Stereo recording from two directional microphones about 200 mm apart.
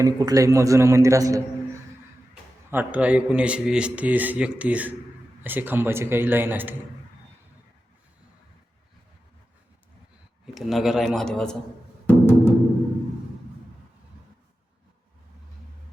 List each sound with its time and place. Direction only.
0.0 s speech: 20° right (ahead or behind)
2.6 s speech: 10° right (ahead or behind)
10.4 s a man's voice: centre (ahead or behind)
12.0 s music: 10° left (ahead or behind)